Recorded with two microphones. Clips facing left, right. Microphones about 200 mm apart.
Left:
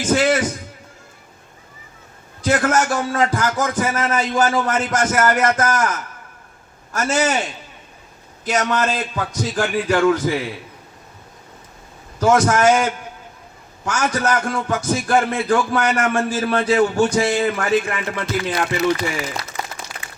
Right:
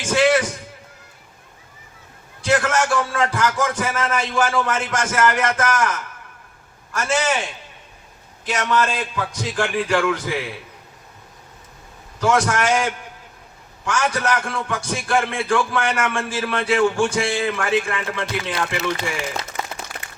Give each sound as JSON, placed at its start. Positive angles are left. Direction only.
{"t": 0.0, "sound": "a sound", "side_deg": 40}
{"t": 2.4, "sound": "a man's voice", "side_deg": 40}
{"t": 8.4, "sound": "a man's voice", "side_deg": 40}
{"t": 12.2, "sound": "a man's voice", "side_deg": 40}
{"t": 18.8, "sound": "speech", "side_deg": -25}